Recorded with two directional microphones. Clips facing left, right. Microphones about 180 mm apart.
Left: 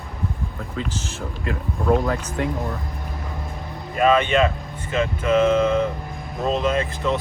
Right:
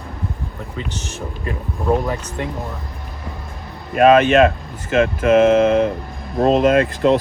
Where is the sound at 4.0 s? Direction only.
70° right (ahead or behind).